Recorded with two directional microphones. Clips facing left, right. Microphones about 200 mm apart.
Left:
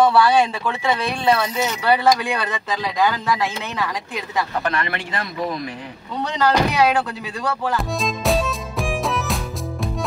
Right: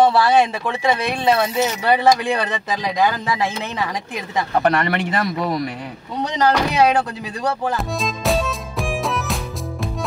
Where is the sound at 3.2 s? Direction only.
25° right (ahead or behind).